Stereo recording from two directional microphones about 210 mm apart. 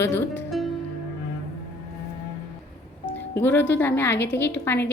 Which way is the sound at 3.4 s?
10° left (ahead or behind).